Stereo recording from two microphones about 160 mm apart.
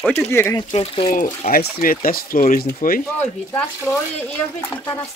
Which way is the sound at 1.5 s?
65° left (ahead or behind).